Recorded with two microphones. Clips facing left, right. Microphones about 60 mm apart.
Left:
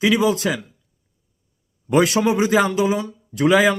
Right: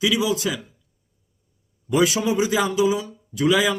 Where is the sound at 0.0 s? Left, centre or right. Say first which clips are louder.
Left 4 dB; left.